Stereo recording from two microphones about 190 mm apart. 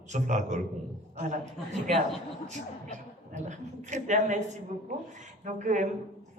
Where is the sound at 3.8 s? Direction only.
40° right (ahead or behind).